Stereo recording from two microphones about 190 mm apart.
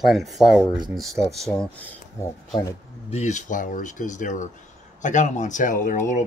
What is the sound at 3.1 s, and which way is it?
Speech, 40° left (ahead or behind).